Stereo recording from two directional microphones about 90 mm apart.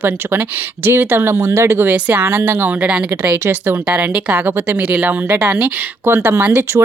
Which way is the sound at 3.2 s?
25° right (ahead or behind).